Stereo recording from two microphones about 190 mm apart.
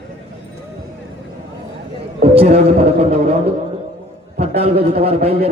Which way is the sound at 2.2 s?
35° right (ahead or behind).